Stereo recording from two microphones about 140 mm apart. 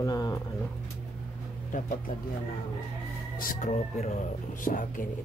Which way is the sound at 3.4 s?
75° left (ahead or behind).